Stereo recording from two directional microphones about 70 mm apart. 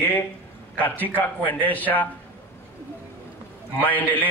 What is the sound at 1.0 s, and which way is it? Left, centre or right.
A man's voice, left.